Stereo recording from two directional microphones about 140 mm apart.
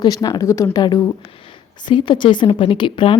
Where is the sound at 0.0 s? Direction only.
30° left (ahead or behind).